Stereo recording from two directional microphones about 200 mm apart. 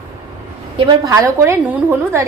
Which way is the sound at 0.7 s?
20° right (ahead or behind).